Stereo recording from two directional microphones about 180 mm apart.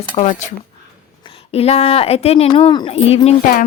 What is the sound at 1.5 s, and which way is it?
Speech, 35° left (ahead or behind).